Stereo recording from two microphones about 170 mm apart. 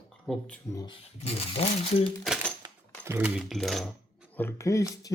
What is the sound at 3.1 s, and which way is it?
Speech, 10° right (ahead or behind).